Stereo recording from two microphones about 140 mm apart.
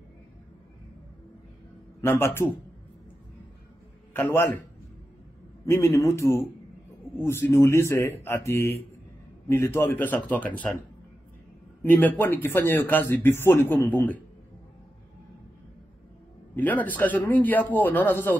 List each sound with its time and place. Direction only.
2.0 s a man's voice: 15° left (ahead or behind)
4.1 s a man's voice: 15° left (ahead or behind)
5.7 s a man's voice: 20° left (ahead or behind)
11.8 s a man's voice: 15° left (ahead or behind)
16.5 s a man's voice: 10° left (ahead or behind)